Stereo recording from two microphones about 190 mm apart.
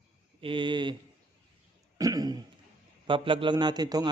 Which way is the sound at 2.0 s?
20° right (ahead or behind).